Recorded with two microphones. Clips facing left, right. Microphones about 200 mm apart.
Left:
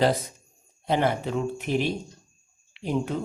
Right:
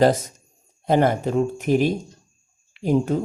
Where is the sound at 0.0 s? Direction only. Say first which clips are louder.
Right 5 dB; 45° right (ahead or behind).